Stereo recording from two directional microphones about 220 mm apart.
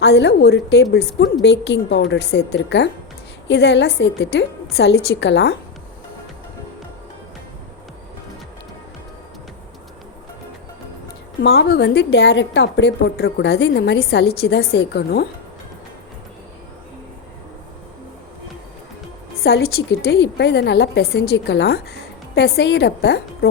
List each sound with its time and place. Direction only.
0.0 s a woman's voice: 50° left (ahead or behind)
11.4 s a woman's voice: 55° left (ahead or behind)
19.4 s a woman's voice: 45° left (ahead or behind)